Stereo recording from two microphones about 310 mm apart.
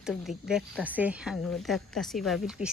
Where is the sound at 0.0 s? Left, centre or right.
Centre.